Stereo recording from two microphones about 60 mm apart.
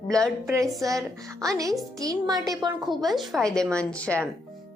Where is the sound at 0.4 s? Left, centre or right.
Right.